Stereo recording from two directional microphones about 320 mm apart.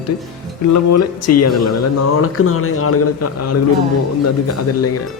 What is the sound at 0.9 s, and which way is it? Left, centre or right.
Speech, left.